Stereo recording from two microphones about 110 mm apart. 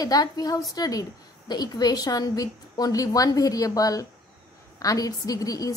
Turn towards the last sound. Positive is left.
turn(degrees=35)  # may be behind; listen again after turning